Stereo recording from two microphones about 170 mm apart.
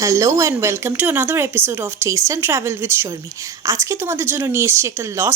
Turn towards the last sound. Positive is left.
turn(degrees=-15)  # may be behind; listen again after turning